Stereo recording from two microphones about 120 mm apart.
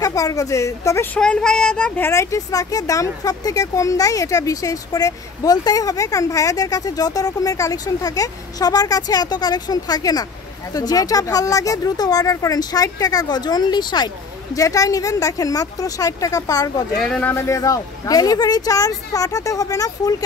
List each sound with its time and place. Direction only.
0.0 s speech: 30° left (ahead or behind)
1.1 s child singing: 10° left (ahead or behind)
2.0 s speech: 25° left (ahead or behind)
17.2 s speech: 20° left (ahead or behind)